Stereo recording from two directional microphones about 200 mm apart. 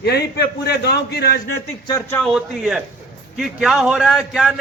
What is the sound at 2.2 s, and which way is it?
A man's voice, 5° right (ahead or behind).